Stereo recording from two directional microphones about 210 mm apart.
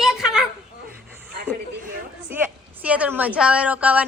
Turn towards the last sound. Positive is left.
turn(degrees=-5)  # may be behind; listen again after turning